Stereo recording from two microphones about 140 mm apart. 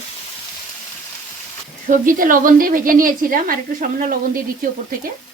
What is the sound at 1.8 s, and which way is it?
Speech, 75° right (ahead or behind).